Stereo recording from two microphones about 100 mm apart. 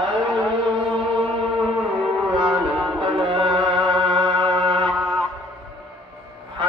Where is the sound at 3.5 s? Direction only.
55° right (ahead or behind).